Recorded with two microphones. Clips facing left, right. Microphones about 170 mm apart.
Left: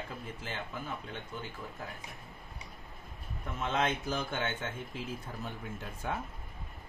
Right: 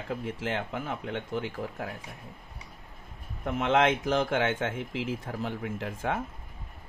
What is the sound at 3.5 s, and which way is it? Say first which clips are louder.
Speech: right 8 dB; 90° right.